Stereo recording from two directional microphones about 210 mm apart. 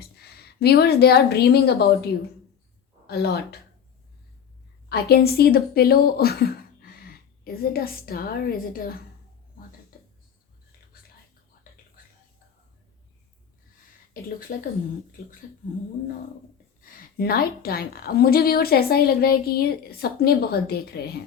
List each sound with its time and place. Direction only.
0.2 s a woman's voice: 50° left (ahead or behind)
4.9 s a woman's voice: 50° left (ahead or behind)
14.1 s a sound: 40° left (ahead or behind)
16.8 s a woman's voice: 45° left (ahead or behind)